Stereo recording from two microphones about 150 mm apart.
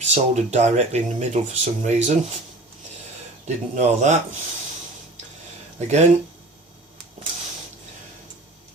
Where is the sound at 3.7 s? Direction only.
50° right (ahead or behind).